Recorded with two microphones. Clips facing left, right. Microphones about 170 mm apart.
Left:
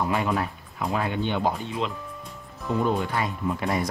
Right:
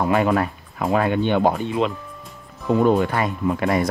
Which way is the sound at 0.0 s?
65° right (ahead or behind).